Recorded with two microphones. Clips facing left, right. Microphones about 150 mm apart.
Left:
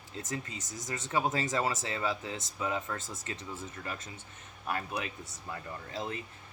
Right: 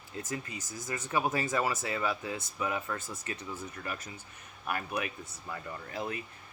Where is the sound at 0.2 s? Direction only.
25° left (ahead or behind).